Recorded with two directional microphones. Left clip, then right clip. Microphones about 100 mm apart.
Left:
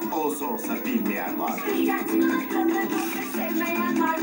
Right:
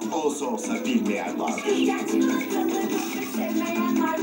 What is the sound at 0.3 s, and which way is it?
Speech, 20° right (ahead or behind).